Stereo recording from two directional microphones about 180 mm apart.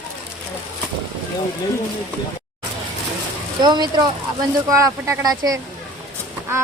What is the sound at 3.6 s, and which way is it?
Speech, 25° right (ahead or behind).